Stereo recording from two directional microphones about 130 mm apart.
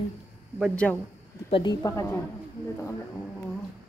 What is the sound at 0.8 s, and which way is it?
Speech, 5° left (ahead or behind).